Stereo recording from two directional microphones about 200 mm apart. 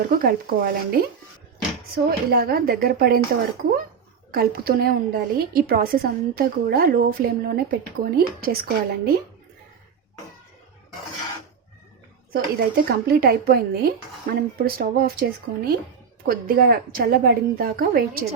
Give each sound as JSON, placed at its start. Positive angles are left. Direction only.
{"t": 0.2, "sound": "a woman's voice", "side_deg": -50}
{"t": 2.0, "sound": "a woman's voice", "side_deg": -50}
{"t": 4.3, "sound": "a woman's voice", "side_deg": -50}
{"t": 12.3, "sound": "a woman's voice", "side_deg": -50}